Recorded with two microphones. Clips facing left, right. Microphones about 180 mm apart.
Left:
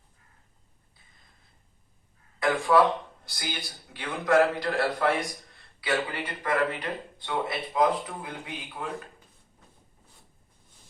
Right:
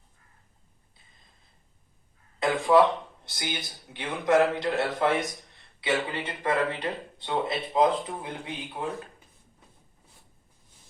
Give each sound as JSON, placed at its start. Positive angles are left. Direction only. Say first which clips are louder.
{"t": 2.4, "sound": "speech", "louder": "right 1 dB", "side_deg": -20}